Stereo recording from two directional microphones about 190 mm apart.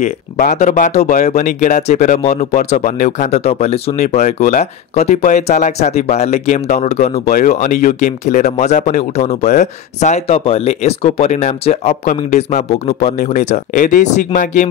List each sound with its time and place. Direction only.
0.0 s speech: 45° left (ahead or behind)